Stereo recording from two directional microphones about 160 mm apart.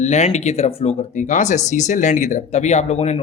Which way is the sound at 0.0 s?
45° left (ahead or behind).